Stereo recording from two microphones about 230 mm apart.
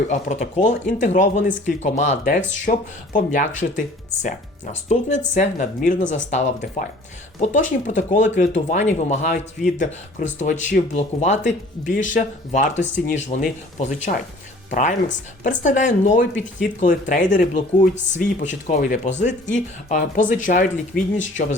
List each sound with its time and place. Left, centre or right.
0.1 s speech: left